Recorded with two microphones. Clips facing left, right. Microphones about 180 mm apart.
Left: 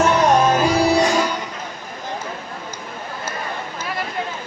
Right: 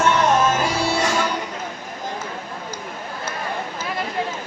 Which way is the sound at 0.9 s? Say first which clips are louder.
Left 5 dB; 15° left (ahead or behind).